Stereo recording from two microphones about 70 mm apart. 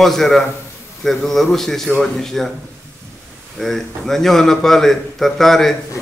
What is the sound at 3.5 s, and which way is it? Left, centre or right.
A man's voice, centre.